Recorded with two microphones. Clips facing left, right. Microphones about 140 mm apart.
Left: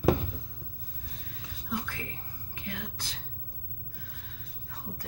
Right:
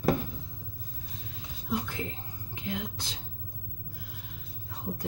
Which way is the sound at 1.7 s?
20° right (ahead or behind).